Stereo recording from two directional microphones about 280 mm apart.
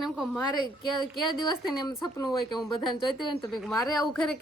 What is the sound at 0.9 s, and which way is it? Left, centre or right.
Speech, left.